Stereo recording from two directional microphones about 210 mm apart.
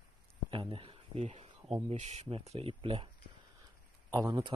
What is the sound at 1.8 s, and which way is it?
Speech, 30° right (ahead or behind).